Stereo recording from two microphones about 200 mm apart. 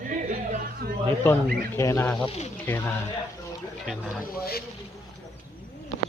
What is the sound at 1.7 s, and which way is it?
Speech, 15° left (ahead or behind).